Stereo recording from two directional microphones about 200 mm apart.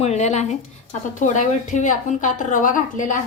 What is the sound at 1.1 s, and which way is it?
A woman's voice, 40° left (ahead or behind).